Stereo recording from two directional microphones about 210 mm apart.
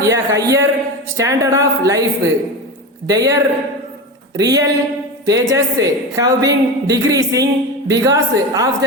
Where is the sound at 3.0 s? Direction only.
15° right (ahead or behind).